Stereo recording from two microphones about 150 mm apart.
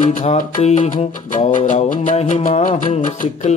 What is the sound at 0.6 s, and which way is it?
Music, 45° left (ahead or behind).